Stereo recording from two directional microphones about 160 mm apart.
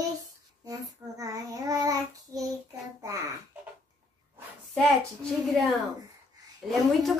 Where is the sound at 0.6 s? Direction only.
20° right (ahead or behind).